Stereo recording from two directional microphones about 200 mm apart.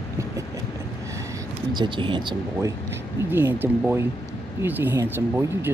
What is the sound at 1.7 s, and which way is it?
Speech, 25° right (ahead or behind).